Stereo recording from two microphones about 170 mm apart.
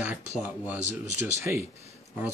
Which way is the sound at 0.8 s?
45° right (ahead or behind).